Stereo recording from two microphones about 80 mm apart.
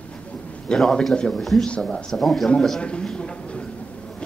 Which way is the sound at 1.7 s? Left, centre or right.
Centre.